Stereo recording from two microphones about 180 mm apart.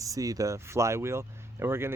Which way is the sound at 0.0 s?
20° right (ahead or behind).